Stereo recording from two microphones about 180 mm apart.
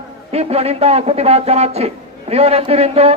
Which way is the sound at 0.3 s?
35° right (ahead or behind).